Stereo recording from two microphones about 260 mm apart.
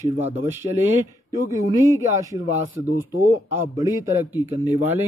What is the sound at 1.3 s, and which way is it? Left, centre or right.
Speech, centre.